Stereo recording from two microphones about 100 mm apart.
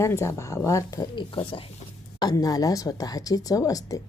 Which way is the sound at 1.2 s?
55° left (ahead or behind).